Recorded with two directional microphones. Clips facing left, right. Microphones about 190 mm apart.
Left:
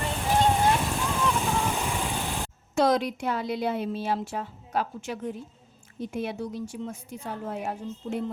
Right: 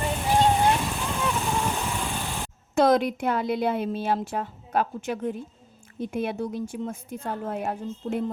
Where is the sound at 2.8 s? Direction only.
55° right (ahead or behind).